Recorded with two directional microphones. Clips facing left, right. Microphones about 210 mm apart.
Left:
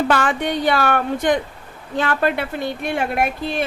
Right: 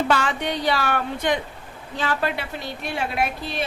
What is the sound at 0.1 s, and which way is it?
A woman's voice, 50° left (ahead or behind).